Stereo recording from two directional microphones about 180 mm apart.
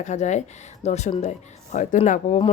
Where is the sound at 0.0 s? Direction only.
40° left (ahead or behind).